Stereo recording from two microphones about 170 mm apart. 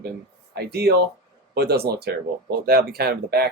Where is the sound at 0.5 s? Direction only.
70° right (ahead or behind).